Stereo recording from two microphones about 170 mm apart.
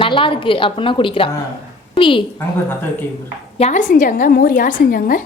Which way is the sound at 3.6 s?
45° left (ahead or behind).